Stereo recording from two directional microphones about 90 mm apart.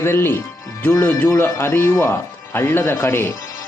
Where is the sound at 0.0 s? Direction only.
25° left (ahead or behind).